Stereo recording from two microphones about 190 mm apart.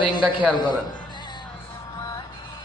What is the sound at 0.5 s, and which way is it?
Speech, 25° left (ahead or behind).